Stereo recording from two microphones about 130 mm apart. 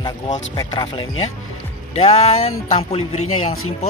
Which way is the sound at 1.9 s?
55° left (ahead or behind).